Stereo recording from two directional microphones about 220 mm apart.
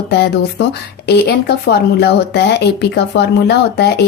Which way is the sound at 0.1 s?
50° left (ahead or behind).